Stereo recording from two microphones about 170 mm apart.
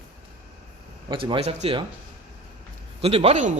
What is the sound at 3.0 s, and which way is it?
Speech, 35° right (ahead or behind).